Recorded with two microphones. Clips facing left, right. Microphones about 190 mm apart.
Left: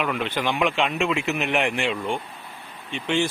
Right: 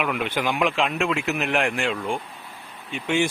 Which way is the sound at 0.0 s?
5° right (ahead or behind).